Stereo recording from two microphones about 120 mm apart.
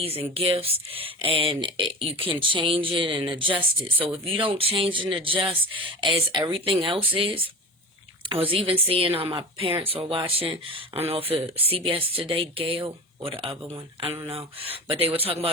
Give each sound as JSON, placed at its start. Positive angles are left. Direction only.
{"t": 0.0, "sound": "speech", "side_deg": -50}
{"t": 14.3, "sound": "speech", "side_deg": -50}